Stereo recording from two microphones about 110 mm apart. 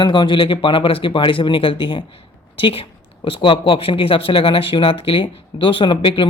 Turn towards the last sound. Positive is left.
turn(degrees=50)  # may be behind; listen again after turning